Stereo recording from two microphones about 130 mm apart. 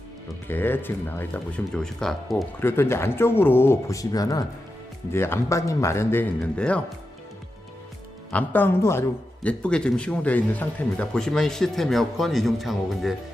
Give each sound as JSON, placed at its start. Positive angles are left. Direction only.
{"t": 0.4, "sound": "speech", "side_deg": 15}
{"t": 2.6, "sound": "speech", "side_deg": 20}
{"t": 8.3, "sound": "speech", "side_deg": 15}